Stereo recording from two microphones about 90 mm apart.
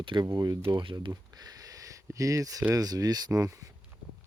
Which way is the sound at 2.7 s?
45° right (ahead or behind).